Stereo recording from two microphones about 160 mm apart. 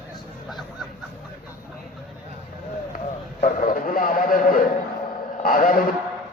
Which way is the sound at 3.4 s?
55° left (ahead or behind).